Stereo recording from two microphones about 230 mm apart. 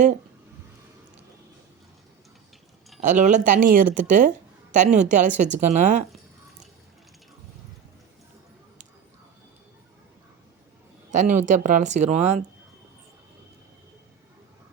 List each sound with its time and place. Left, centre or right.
3.0 s a woman's voice: right
11.1 s a woman's voice: right